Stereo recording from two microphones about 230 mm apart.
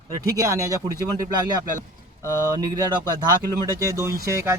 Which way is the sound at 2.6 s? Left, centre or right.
Centre.